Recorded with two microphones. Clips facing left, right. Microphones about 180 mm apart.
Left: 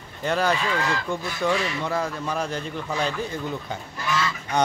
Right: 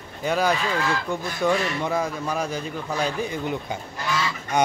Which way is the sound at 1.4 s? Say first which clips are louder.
Right 2 dB; 20° right (ahead or behind).